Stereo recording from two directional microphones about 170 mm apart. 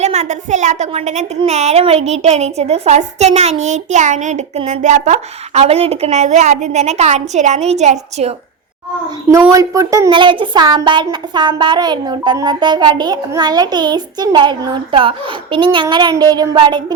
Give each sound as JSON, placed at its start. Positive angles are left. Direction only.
{"t": 0.0, "sound": "a woman's voice", "side_deg": -40}
{"t": 9.3, "sound": "speech", "side_deg": -20}
{"t": 10.1, "sound": "speech", "side_deg": -30}